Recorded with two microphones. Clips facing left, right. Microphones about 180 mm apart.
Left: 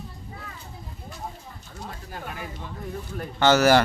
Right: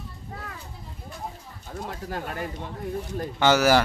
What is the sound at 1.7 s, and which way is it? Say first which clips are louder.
Pigeon: right 7 dB; 55° right (ahead or behind).